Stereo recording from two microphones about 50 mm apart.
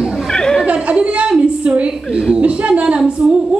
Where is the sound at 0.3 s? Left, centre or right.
Centre.